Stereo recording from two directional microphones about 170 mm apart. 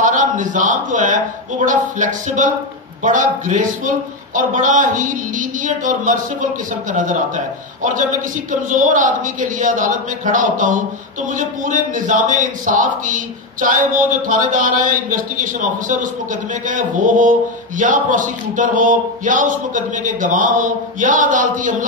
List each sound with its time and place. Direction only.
0.0 s speech: 50° right (ahead or behind)